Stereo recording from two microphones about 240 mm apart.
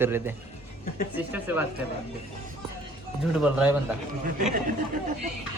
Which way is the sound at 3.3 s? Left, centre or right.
Centre.